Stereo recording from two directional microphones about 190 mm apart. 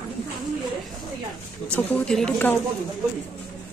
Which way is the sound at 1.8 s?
5° left (ahead or behind).